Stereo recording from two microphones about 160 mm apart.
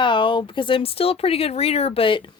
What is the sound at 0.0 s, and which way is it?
Speech, 30° left (ahead or behind).